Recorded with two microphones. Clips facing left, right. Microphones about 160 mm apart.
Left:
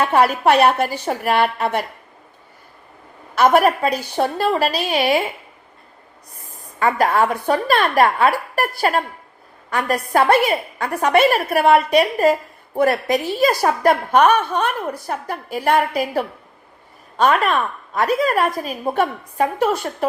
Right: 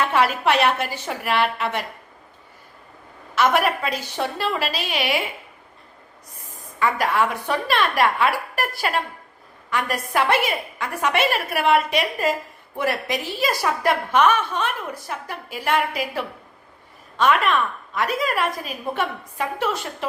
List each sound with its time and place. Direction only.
0.0 s a woman's voice: 40° left (ahead or behind)
3.3 s a woman's voice: 45° left (ahead or behind)
6.7 s a woman's voice: 45° left (ahead or behind)